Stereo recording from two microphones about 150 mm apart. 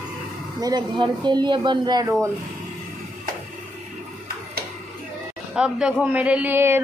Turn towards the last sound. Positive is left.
turn(degrees=-15)  # may be behind; listen again after turning